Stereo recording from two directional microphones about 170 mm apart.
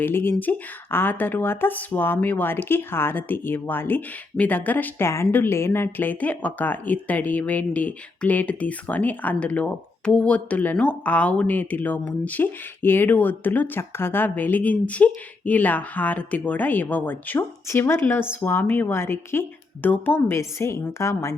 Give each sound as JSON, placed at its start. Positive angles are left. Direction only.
{"t": 0.0, "sound": "speech", "side_deg": 15}